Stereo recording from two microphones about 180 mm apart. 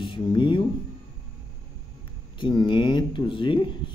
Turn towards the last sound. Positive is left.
turn(degrees=25)  # may be behind; listen again after turning